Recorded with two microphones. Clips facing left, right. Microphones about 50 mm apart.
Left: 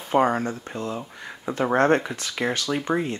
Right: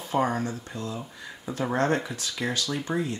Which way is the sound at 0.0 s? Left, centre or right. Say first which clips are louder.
Left 5 dB; left.